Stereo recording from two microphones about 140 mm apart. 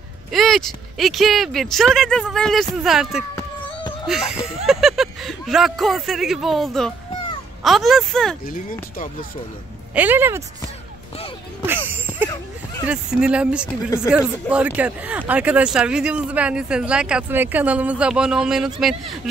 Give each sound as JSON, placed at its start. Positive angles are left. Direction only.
{"t": 0.3, "sound": "speech", "side_deg": 0}
{"t": 9.9, "sound": "speech", "side_deg": -15}
{"t": 11.9, "sound": "a sound", "side_deg": -10}
{"t": 12.8, "sound": "speech", "side_deg": -5}
{"t": 13.8, "sound": "speech", "side_deg": 25}
{"t": 14.1, "sound": "speech", "side_deg": -10}